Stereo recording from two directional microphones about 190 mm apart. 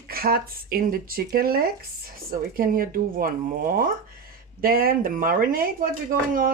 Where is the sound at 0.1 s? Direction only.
50° right (ahead or behind).